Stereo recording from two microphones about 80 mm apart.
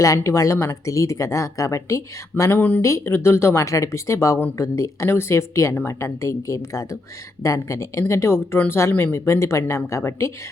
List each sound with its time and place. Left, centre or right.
0.0 s speech: left
2.4 s speech: left
2.8 s speech: left